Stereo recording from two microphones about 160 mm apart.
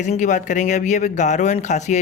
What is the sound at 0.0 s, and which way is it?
A man's voice, 50° left (ahead or behind).